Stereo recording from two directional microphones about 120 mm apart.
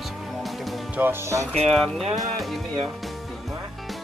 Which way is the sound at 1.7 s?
5° left (ahead or behind).